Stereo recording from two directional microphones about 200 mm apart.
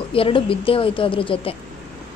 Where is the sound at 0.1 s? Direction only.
25° left (ahead or behind).